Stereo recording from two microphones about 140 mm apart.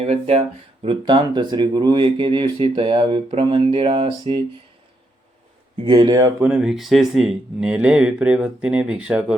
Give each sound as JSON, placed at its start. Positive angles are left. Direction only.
{"t": 0.0, "sound": "speech", "side_deg": -50}
{"t": 1.0, "sound": "speech", "side_deg": -30}
{"t": 5.8, "sound": "speech", "side_deg": -35}
{"t": 6.4, "sound": "speech", "side_deg": -5}